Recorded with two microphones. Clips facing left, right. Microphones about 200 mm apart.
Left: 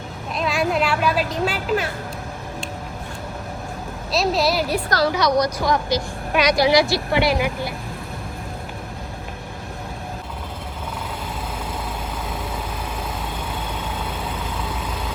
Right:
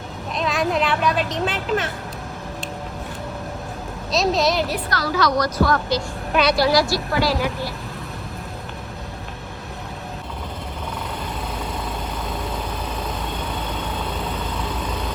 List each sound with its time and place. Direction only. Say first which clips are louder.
0.3 s a child's voice: even; 5° left (ahead or behind)
4.1 s speech: even; centre (ahead or behind)
5.1 s a woman's voice: even; 20° left (ahead or behind)
13.5 s vehicle: right 1 dB; 10° left (ahead or behind)